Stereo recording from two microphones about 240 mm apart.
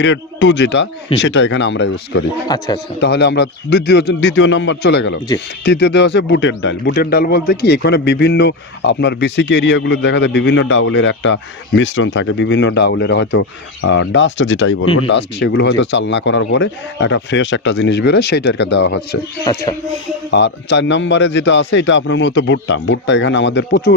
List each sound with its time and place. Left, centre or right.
0.0 s a man's voice: left
2.4 s speech: centre
3.0 s a man's voice: left
19.4 s speech: centre
20.2 s a man's voice: left